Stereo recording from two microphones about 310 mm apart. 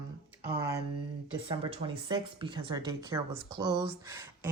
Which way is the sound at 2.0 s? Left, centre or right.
Centre.